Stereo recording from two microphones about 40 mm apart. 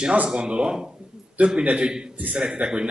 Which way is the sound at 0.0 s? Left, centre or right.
Right.